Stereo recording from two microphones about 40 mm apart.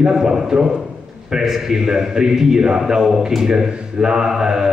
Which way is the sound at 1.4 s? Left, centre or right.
Centre.